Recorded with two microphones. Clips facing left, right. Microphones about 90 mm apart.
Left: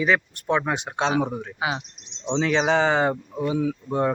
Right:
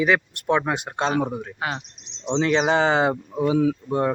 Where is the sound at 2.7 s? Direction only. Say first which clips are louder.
Right 1 dB; 10° right (ahead or behind).